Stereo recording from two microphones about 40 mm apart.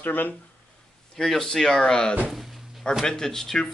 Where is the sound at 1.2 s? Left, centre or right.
Centre.